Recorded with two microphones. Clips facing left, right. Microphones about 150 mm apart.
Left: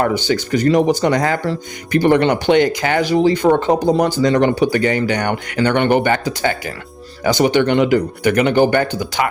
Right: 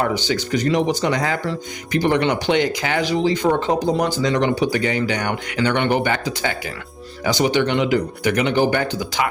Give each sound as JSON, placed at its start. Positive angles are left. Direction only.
{"t": 0.0, "sound": "speech", "side_deg": 50}